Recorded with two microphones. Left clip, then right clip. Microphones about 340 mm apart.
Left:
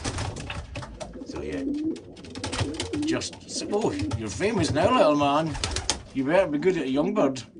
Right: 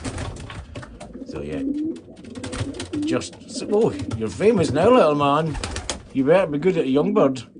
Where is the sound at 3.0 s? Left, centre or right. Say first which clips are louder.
Right 3 dB; centre.